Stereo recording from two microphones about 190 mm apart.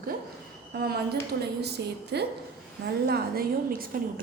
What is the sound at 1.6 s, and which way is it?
A woman's voice, 60° right (ahead or behind).